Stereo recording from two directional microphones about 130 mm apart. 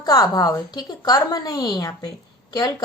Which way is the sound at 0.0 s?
30° left (ahead or behind).